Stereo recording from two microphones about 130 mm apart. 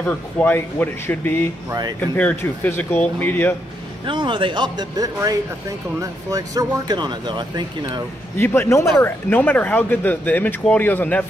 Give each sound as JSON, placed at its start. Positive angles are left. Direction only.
{"t": 0.0, "sound": "speech", "side_deg": 15}
{"t": 1.7, "sound": "speech", "side_deg": -30}
{"t": 2.0, "sound": "speech", "side_deg": 10}
{"t": 4.0, "sound": "speech", "side_deg": -40}
{"t": 8.4, "sound": "a man's voice", "side_deg": 20}